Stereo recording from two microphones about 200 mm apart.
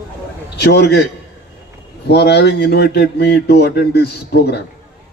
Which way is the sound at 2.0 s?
55° left (ahead or behind).